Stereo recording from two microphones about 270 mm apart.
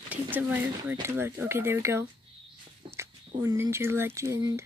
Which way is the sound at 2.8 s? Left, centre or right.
Centre.